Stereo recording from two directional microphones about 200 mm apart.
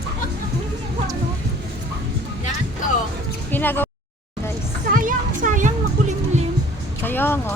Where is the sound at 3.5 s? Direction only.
10° left (ahead or behind).